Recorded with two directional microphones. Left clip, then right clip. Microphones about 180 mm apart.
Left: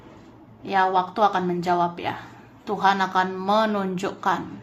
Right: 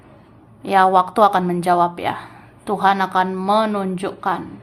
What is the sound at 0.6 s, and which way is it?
A woman's voice, 25° right (ahead or behind).